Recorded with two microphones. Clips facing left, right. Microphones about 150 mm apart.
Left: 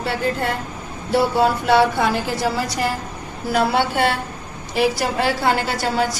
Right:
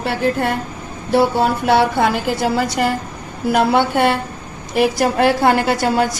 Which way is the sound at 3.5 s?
50° right (ahead or behind).